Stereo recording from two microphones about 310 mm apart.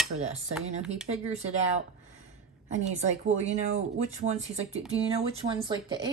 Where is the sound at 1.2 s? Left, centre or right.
Right.